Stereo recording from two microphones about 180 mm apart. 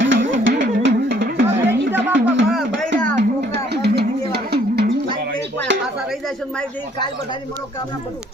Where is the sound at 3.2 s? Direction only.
65° right (ahead or behind).